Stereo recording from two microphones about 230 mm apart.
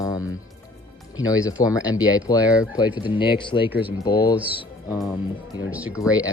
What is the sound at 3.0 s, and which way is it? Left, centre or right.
Speech, left.